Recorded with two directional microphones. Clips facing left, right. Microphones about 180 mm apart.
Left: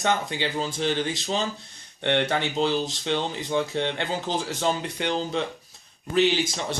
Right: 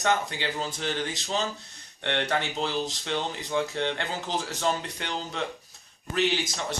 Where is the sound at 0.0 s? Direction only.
20° left (ahead or behind).